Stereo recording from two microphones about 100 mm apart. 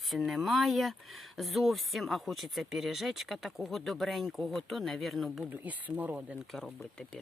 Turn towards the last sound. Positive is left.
turn(degrees=5)  # may be behind; listen again after turning